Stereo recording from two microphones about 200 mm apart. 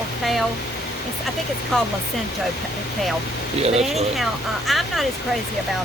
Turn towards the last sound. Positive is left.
turn(degrees=0)  # may be behind; listen again after turning